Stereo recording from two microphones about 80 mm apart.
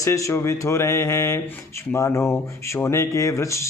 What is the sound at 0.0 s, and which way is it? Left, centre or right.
Speech, left.